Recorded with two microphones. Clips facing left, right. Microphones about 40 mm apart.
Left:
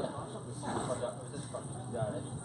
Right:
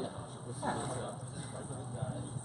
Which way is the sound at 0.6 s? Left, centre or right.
Centre.